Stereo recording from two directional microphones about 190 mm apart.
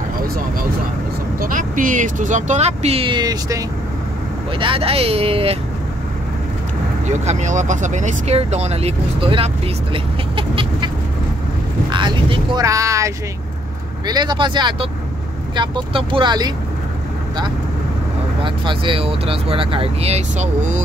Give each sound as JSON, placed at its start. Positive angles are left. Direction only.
{"t": 1.4, "sound": "speech", "side_deg": -45}
{"t": 7.1, "sound": "speech", "side_deg": -40}
{"t": 9.9, "sound": "chicken", "side_deg": -25}
{"t": 11.9, "sound": "speech", "side_deg": -25}
{"t": 18.4, "sound": "speech", "side_deg": -25}